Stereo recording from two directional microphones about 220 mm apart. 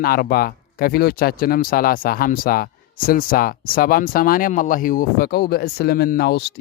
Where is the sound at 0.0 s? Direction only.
45° left (ahead or behind).